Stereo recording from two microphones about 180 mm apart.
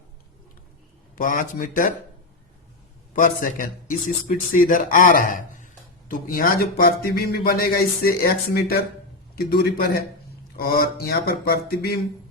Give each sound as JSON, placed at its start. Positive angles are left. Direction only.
{"t": 1.1, "sound": "a man's voice", "side_deg": 50}
{"t": 3.1, "sound": "a man's voice", "side_deg": 50}